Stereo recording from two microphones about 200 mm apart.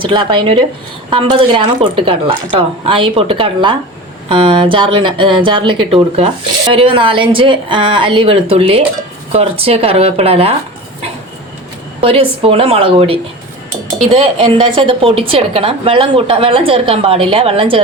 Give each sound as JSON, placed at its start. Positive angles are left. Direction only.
{"t": 0.0, "sound": "a woman's voice", "side_deg": -25}
{"t": 11.9, "sound": "a woman's voice", "side_deg": -30}